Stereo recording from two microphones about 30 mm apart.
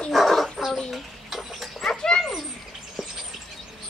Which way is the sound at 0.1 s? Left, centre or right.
Centre.